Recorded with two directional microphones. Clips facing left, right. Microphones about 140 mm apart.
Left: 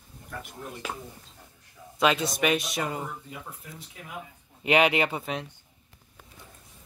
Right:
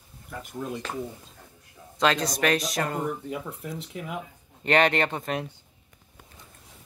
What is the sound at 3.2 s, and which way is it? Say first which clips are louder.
Speech: right 9 dB; 65° right (ahead or behind).